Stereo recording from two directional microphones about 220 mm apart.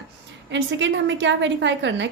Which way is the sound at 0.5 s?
55° right (ahead or behind).